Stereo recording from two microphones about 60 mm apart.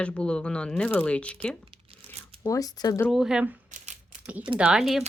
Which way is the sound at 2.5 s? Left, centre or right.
Left.